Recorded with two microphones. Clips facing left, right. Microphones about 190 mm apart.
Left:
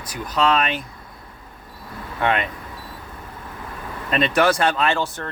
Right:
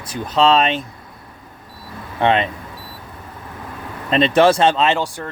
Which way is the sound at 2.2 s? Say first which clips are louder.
Right 5 dB; 25° right (ahead or behind).